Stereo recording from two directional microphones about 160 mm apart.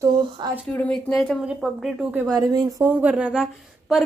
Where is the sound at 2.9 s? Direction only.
10° right (ahead or behind).